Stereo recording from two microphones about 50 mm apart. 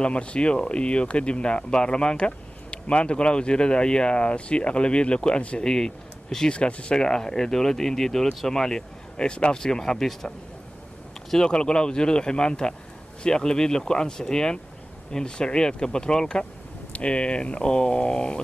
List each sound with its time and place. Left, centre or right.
0.0 s speech: left
11.3 s speech: centre